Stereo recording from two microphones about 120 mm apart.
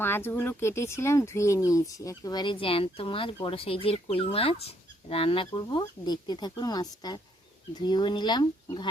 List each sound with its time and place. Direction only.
0.0 s speech: 20° left (ahead or behind); by 8.9 s 40° left (ahead or behind)